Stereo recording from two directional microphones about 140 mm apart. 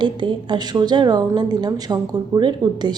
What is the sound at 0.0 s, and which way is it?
Speech, 35° right (ahead or behind).